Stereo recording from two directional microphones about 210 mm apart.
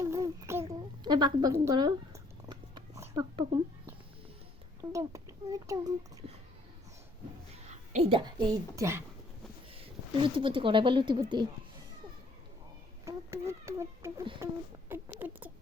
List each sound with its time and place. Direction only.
0.0 s a sound: 15° right (ahead or behind)
4.8 s a child's voice: 15° right (ahead or behind)
7.5 s a sound: 30° right (ahead or behind)
8.7 s speech: 15° right (ahead or behind)
10.2 s speech: 25° right (ahead or behind)
13.1 s speech: 10° right (ahead or behind)
14.8 s rodents: 10° right (ahead or behind)